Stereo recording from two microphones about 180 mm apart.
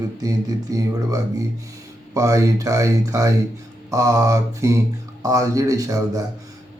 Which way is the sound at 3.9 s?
20° right (ahead or behind).